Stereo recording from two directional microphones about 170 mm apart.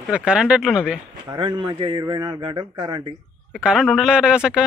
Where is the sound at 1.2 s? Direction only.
30° right (ahead or behind).